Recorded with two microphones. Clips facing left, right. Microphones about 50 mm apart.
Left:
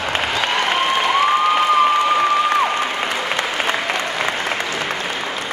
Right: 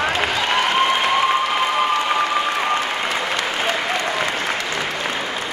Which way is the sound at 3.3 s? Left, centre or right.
Centre.